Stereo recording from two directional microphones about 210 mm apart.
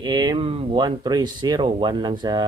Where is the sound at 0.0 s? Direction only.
20° right (ahead or behind).